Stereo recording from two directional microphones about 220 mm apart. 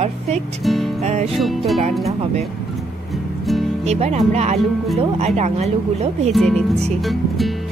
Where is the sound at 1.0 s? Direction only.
30° right (ahead or behind).